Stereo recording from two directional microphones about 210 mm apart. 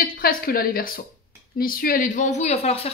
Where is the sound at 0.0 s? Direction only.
45° left (ahead or behind).